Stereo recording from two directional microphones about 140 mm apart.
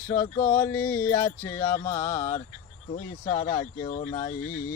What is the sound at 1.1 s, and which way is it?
Speech, 35° left (ahead or behind).